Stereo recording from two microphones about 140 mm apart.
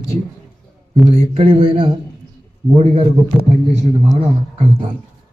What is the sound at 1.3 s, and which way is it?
A man's voice, 40° right (ahead or behind).